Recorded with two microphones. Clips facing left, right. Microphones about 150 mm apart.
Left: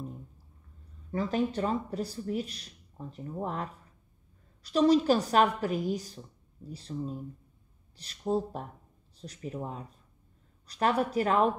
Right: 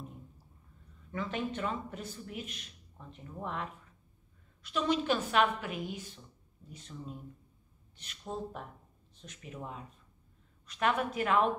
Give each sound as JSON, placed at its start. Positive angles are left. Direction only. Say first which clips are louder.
{"t": 1.1, "sound": "speech", "louder": "left 6 dB", "side_deg": 35}